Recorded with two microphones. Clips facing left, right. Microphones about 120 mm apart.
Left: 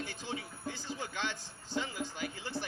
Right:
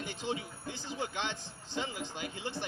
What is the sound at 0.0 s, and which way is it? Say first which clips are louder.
A man's voice: right 3 dB; 20° right (ahead or behind).